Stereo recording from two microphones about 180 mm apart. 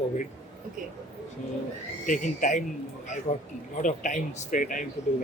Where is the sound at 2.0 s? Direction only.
45° left (ahead or behind).